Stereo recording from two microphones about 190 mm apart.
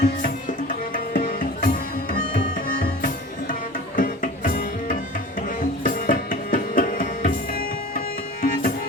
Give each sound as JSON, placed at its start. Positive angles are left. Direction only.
{"t": 0.0, "sound": "music", "side_deg": 45}